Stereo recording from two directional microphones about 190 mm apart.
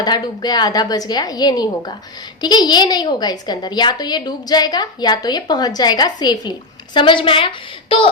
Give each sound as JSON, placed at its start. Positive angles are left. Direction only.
{"t": 0.0, "sound": "a woman's voice", "side_deg": 20}